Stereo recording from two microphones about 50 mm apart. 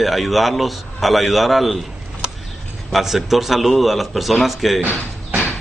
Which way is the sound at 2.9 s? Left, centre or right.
Centre.